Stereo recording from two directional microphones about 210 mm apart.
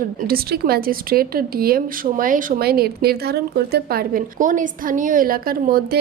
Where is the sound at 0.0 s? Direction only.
45° right (ahead or behind).